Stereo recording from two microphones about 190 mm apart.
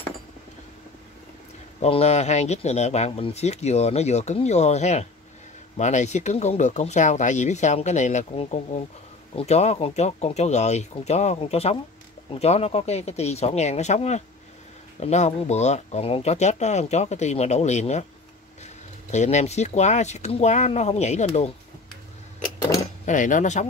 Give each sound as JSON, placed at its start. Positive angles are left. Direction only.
{"t": 1.8, "sound": "speech", "side_deg": 35}
{"t": 23.0, "sound": "speech", "side_deg": 45}